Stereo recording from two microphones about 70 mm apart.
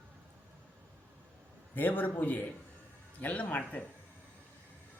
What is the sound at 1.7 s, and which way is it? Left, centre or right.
A man's voice, left.